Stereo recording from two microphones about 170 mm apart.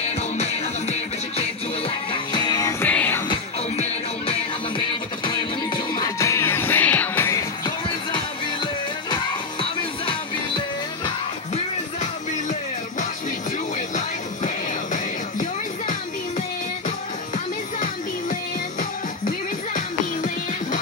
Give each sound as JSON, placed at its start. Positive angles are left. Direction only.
{"t": 0.4, "sound": "music", "side_deg": 40}
{"t": 2.8, "sound": "music", "side_deg": 10}
{"t": 3.7, "sound": "music", "side_deg": 40}
{"t": 4.7, "sound": "music", "side_deg": 30}
{"t": 11.5, "sound": "music", "side_deg": 45}
{"t": 13.7, "sound": "music", "side_deg": 45}
{"t": 18.3, "sound": "music", "side_deg": 55}